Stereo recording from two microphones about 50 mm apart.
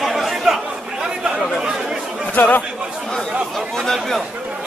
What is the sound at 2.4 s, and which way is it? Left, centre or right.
Chatter, left.